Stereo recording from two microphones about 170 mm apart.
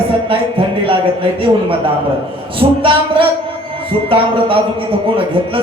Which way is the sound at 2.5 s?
30° right (ahead or behind).